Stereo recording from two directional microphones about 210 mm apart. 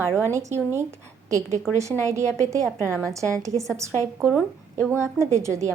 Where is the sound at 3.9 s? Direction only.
10° left (ahead or behind).